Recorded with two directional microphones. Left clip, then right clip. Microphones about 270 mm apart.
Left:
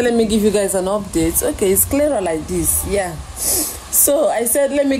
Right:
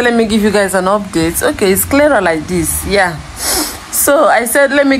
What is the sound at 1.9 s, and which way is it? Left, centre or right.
Speech, right.